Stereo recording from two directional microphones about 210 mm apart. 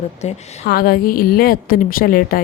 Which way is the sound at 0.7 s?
45° left (ahead or behind).